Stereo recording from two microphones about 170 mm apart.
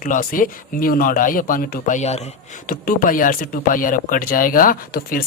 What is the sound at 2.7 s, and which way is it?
Speech, 55° left (ahead or behind).